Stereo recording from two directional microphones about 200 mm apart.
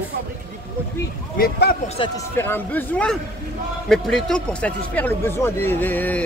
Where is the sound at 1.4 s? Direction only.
50° left (ahead or behind).